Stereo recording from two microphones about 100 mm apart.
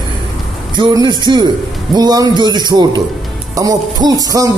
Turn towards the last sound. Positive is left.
turn(degrees=-35)  # may be behind; listen again after turning